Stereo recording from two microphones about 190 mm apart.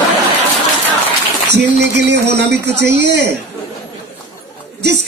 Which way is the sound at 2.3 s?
65° right (ahead or behind).